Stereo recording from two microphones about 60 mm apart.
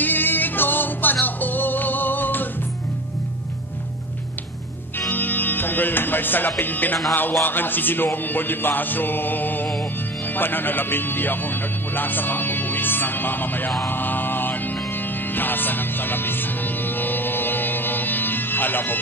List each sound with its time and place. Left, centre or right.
0.0 s music: left
5.1 s music: left
6.6 s speech: left
13.8 s music: left